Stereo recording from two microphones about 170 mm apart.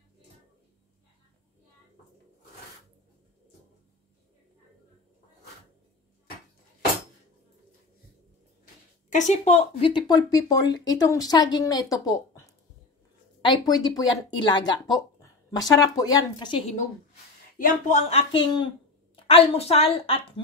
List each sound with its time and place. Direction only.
9.1 s speech: 45° left (ahead or behind); by 16.7 s 30° left (ahead or behind)
17.6 s speech: 50° left (ahead or behind)
18.3 s a woman's voice: 30° left (ahead or behind)